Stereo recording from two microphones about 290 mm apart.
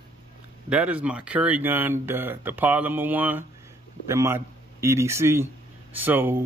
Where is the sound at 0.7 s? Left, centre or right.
Centre.